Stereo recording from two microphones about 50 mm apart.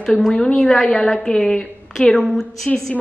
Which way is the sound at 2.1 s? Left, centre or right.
Centre.